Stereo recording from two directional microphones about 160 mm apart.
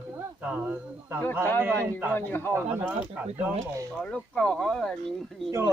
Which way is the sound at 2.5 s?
10° right (ahead or behind).